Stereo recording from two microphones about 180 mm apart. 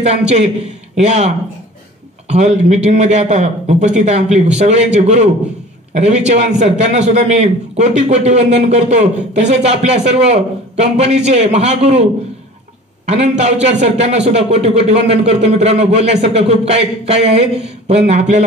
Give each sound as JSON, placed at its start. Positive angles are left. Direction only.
{"t": 0.9, "sound": "a man's voice", "side_deg": -40}